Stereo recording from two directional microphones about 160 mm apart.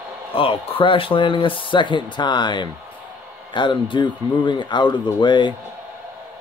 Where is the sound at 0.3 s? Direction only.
35° left (ahead or behind).